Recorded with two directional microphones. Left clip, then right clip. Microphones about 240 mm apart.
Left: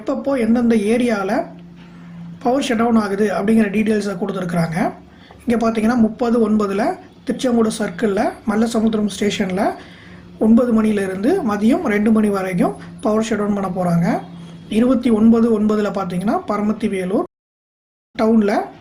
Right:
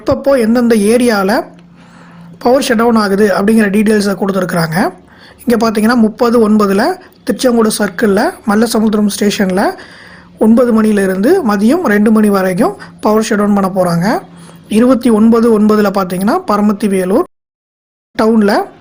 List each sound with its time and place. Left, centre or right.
0.0 s a woman's voice: right
2.4 s a woman's voice: right